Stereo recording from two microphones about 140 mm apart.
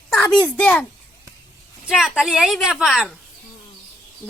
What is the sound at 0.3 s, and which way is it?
Speech, 10° left (ahead or behind).